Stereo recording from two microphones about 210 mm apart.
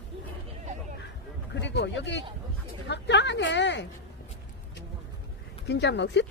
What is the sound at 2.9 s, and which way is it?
Speech, 55° left (ahead or behind).